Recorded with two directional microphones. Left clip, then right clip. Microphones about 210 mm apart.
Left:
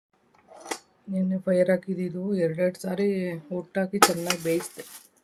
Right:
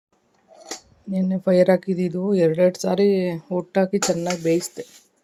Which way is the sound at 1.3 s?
30° right (ahead or behind).